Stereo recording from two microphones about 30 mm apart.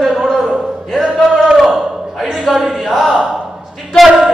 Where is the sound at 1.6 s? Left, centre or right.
Centre.